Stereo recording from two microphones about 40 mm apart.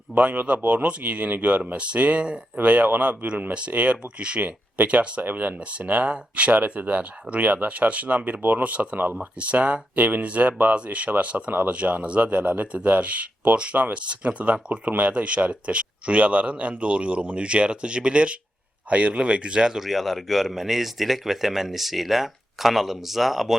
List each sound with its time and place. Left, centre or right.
0.1 s a man's voice: right
3.8 s a man's voice: right
4.4 s a man's voice: right
5.2 s speech: right
5.5 s a man's voice: right
8.2 s speech: right
9.4 s a man's voice: right
15.1 s a man's voice: right
19.8 s speech: centre